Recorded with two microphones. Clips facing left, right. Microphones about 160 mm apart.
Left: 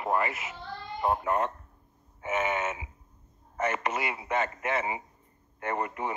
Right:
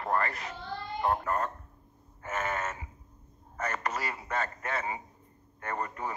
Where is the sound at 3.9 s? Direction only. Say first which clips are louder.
Left 3 dB; 25° left (ahead or behind).